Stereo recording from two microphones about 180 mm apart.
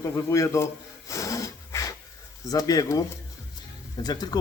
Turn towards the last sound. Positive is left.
turn(degrees=20)  # may be behind; listen again after turning